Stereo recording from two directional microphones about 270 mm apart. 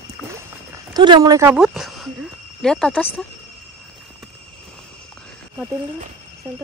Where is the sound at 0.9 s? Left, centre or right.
Centre.